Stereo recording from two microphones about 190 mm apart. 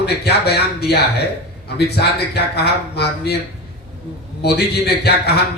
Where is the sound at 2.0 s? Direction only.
60° left (ahead or behind).